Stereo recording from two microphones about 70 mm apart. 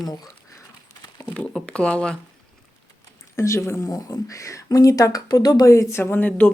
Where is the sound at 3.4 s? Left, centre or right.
Left.